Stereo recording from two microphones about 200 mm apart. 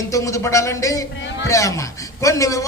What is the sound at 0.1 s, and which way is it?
A man's voice, 15° left (ahead or behind).